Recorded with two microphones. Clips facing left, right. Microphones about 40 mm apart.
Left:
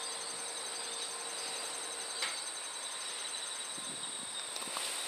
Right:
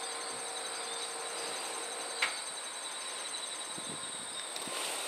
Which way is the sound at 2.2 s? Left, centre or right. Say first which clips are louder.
Right 6 dB; right.